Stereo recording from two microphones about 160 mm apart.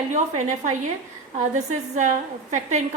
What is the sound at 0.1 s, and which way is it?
A woman's voice, 50° right (ahead or behind).